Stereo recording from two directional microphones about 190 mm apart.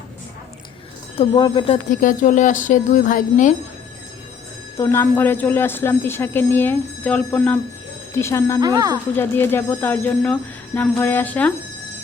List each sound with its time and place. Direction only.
1.1 s speech: 25° left (ahead or behind)
1.9 s speech: 45° left (ahead or behind)
4.8 s a woman's voice: 15° left (ahead or behind)
8.6 s speech: 20° right (ahead or behind)
9.1 s a woman's voice: 10° left (ahead or behind)